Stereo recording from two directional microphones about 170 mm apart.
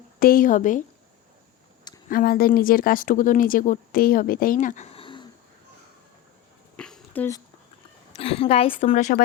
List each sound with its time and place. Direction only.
0.2 s a woman's voice: 55° left (ahead or behind)
2.0 s speech: 60° left (ahead or behind); by 5.3 s 30° left (ahead or behind)
6.7 s a sound: 5° left (ahead or behind)
8.1 s a woman's voice: 35° left (ahead or behind)